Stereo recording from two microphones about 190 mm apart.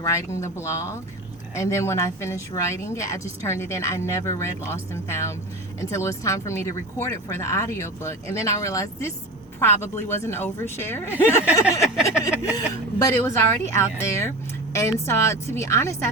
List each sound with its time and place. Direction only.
0.1 s speech: 15° left (ahead or behind)